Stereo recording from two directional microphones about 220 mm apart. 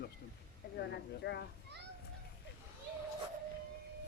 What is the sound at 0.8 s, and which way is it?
Speech, 50° left (ahead or behind).